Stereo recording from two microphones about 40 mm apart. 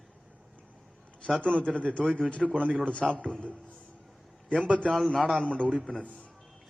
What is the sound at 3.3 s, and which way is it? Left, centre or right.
Speech, left.